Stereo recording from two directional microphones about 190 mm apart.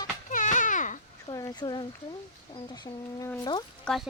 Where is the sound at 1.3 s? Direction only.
20° left (ahead or behind).